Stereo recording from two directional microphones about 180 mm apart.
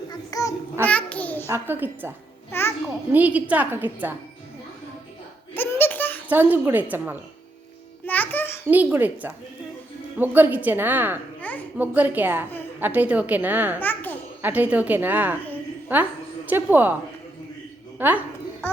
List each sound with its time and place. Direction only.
0.1 s child singing: 20° left (ahead or behind)
0.9 s a sound: 10° left (ahead or behind)
1.5 s a woman's voice: 15° right (ahead or behind)
2.5 s music: 15° left (ahead or behind)
2.8 s a woman's voice: 10° right (ahead or behind)
5.5 s a sound: 10° left (ahead or behind)
6.2 s a woman's voice: 10° right (ahead or behind)
8.0 s music: 10° left (ahead or behind)
8.6 s a woman's voice: 10° right (ahead or behind)
11.3 s babbling: 10° left (ahead or behind)
11.8 s a woman's voice: 10° right (ahead or behind)
13.7 s babbling: 10° left (ahead or behind)
14.4 s a woman's voice: 10° right (ahead or behind)
17.9 s a sound: 10° right (ahead or behind)